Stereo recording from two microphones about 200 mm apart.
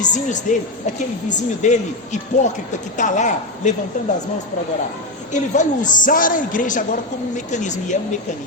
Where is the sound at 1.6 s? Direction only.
35° left (ahead or behind).